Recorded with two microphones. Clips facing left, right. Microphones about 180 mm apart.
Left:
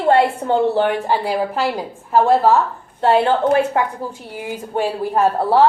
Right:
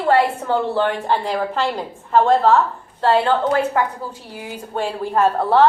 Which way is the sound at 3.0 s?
25° left (ahead or behind).